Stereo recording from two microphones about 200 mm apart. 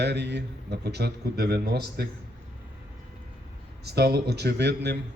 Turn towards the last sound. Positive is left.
turn(degrees=-60)  # may be behind; listen again after turning